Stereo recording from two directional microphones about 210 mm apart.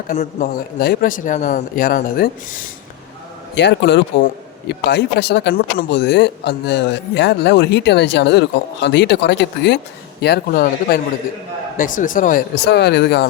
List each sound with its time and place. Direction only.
0.1 s speech: 40° left (ahead or behind)
3.5 s a man's voice: 55° left (ahead or behind)